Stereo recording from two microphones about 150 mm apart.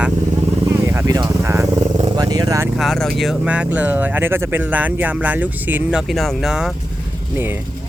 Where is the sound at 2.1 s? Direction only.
25° right (ahead or behind).